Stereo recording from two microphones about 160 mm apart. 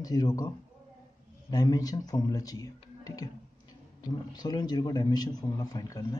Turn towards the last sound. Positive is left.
turn(degrees=20)  # may be behind; listen again after turning